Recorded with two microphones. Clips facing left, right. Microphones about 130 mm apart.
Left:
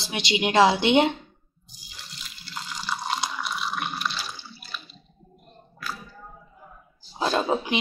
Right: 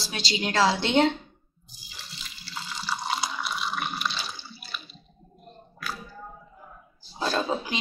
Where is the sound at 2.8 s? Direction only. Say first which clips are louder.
Left 1 dB; centre (ahead or behind).